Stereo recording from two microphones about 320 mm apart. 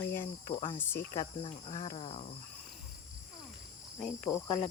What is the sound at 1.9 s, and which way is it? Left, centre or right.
Cricket, left.